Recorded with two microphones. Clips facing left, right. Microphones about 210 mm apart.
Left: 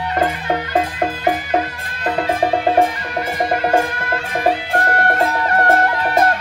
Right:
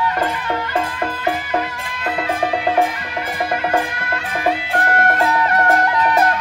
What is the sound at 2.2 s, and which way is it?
Music, 40° left (ahead or behind).